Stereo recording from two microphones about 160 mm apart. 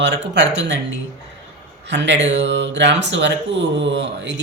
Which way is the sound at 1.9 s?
90° right.